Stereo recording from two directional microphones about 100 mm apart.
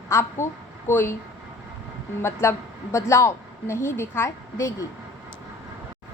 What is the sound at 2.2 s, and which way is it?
A woman's voice, 25° left (ahead or behind).